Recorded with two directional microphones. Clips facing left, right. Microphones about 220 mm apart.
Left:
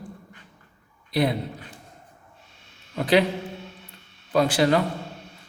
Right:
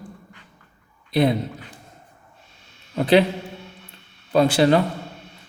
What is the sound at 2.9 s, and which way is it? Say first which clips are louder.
Speech: right 4 dB; 25° right (ahead or behind).